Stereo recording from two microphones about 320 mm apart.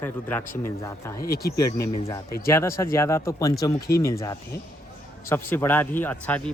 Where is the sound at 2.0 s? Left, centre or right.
Centre.